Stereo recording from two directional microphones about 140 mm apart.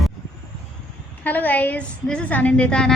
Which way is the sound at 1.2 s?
15° left (ahead or behind).